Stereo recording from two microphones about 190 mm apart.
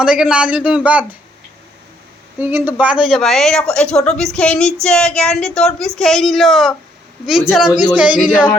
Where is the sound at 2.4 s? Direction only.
10° right (ahead or behind).